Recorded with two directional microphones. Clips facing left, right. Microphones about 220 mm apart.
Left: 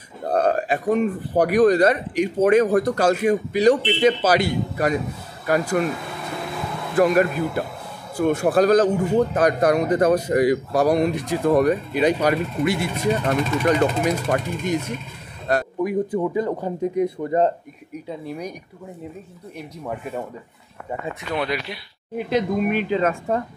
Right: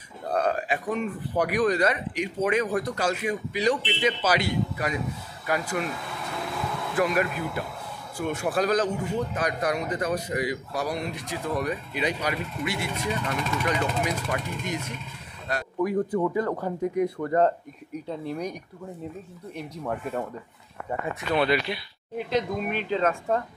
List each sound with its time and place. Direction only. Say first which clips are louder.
0.3 s speech: left 6 dB; 45° left (ahead or behind)
7.0 s speech: left 8 dB; 40° left (ahead or behind)
15.8 s speech: right 2 dB; 15° left (ahead or behind)
18.0 s speech: left 1 dB; 5° left (ahead or behind)
19.5 s speech: left 1 dB; 5° left (ahead or behind)
21.4 s speech: right 4 dB; 5° left (ahead or behind)